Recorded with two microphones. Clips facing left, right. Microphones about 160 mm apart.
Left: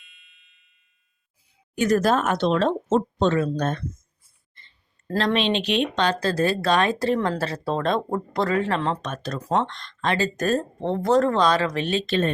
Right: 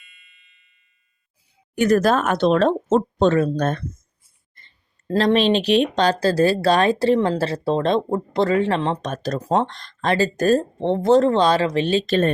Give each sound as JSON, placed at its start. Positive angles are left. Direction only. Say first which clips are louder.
{"t": 0.0, "sound": "music", "louder": "right 3 dB", "side_deg": 0}
{"t": 1.7, "sound": "speech", "louder": "right 3 dB", "side_deg": -60}
{"t": 5.1, "sound": "speech", "louder": "right 5 dB", "side_deg": -35}